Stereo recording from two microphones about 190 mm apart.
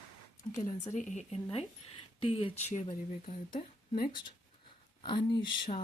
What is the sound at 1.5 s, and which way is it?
Speech, 30° left (ahead or behind).